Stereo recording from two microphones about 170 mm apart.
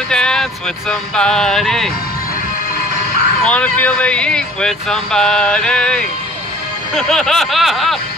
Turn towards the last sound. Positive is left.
turn(degrees=0)  # may be behind; listen again after turning